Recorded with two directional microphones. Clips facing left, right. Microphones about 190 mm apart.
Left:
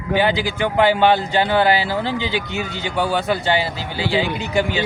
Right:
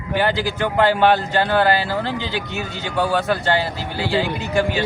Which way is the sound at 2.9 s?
15° left (ahead or behind).